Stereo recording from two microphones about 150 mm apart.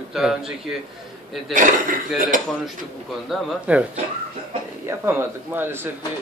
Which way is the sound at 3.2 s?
10° right (ahead or behind).